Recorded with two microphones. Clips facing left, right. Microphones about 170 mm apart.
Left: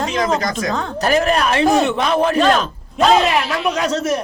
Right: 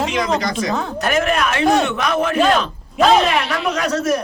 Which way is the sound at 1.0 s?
35° left (ahead or behind).